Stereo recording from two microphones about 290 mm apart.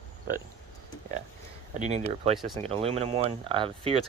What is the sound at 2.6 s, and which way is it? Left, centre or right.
Speech, right.